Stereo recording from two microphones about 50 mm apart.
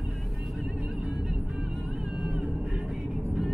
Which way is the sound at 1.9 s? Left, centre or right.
Right.